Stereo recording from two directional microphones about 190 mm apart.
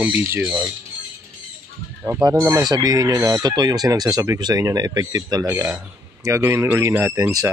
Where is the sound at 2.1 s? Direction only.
15° right (ahead or behind).